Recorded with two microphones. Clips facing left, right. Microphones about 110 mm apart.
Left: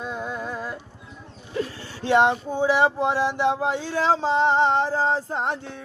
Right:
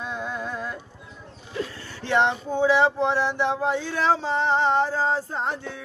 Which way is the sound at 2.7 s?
15° left (ahead or behind).